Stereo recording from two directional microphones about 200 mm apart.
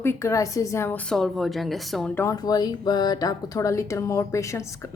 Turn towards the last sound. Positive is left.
turn(degrees=15)  # may be behind; listen again after turning